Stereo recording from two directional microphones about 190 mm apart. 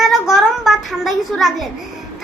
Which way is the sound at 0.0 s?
Centre (ahead or behind).